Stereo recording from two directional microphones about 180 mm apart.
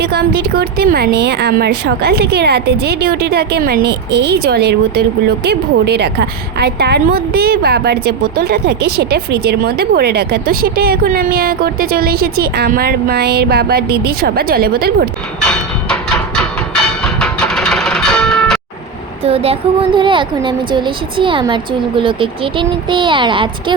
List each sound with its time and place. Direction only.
0.0 s speech: 65° right (ahead or behind)
15.4 s a sound: 5° left (ahead or behind)
17.0 s music: 5° left (ahead or behind)
19.2 s speech: 35° right (ahead or behind)